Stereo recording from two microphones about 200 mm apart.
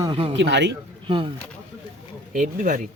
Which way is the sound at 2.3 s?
40° right (ahead or behind).